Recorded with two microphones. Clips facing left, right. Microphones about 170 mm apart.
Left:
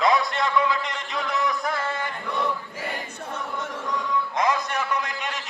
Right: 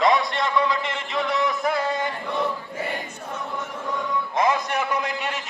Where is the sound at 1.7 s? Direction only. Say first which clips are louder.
Right 4 dB; 15° right (ahead or behind).